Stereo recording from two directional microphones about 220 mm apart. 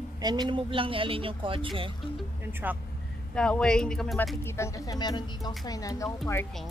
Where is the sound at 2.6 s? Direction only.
10° right (ahead or behind).